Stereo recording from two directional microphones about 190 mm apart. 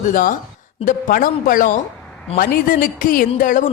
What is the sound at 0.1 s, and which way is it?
Speech, 45° left (ahead or behind).